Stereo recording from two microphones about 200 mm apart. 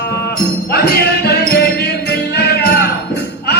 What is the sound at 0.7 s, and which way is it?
Music, 50° left (ahead or behind).